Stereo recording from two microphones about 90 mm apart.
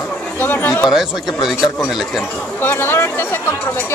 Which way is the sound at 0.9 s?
5° right (ahead or behind).